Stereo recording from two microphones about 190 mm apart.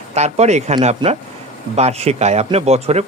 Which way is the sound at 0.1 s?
35° right (ahead or behind).